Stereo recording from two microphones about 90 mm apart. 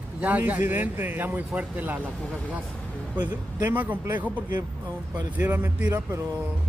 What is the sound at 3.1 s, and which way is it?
Speech, 20° right (ahead or behind).